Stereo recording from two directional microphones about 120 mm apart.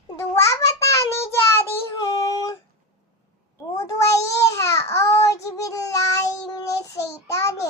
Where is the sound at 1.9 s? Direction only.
30° left (ahead or behind).